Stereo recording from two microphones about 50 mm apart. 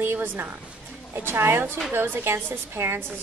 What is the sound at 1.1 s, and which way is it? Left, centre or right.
Speech, right.